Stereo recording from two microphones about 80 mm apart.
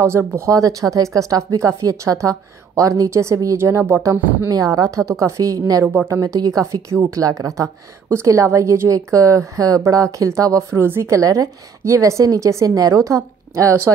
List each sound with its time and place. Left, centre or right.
0.5 s speech: right
5.9 s a woman's voice: right
6.2 s a woman's voice: right